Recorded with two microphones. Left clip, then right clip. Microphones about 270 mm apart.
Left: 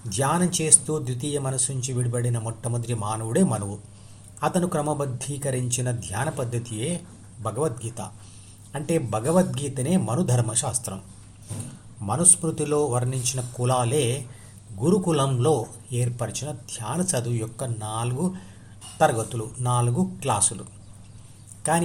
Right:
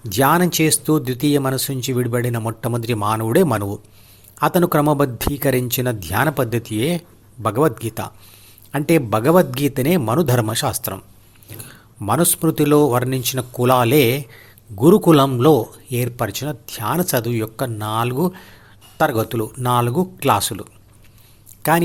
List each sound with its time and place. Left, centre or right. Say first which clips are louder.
0.1 s speech: right 9 dB; right
12.0 s speech: right 6 dB; right